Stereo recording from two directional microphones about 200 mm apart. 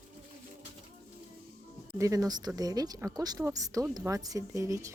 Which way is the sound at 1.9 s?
15° right (ahead or behind).